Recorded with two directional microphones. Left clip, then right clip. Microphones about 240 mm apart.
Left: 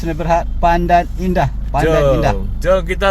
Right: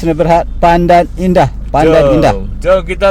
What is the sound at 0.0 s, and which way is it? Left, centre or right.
A man's voice, right.